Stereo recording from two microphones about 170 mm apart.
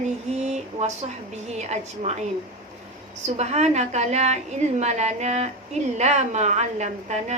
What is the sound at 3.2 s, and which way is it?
A woman's voice, 40° right (ahead or behind).